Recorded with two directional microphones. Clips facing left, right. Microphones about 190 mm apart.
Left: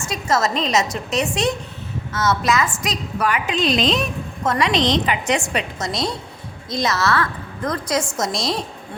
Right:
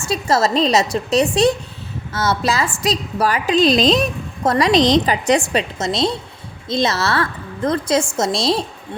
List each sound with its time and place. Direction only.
0.0 s a woman's voice: 30° right (ahead or behind)